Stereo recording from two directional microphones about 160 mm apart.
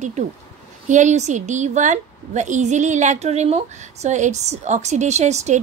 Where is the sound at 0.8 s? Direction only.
50° right (ahead or behind).